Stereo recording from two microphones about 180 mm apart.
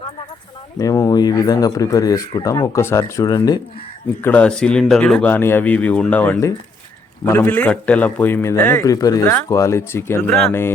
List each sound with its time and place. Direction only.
0.8 s speech: 20° left (ahead or behind)
4.2 s a man's voice: 10° left (ahead or behind)